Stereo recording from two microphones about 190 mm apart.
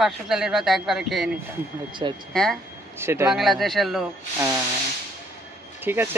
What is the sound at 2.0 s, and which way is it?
Speech, 25° right (ahead or behind).